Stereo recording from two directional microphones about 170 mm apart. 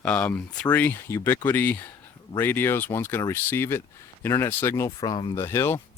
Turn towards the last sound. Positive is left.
turn(degrees=15)  # may be behind; listen again after turning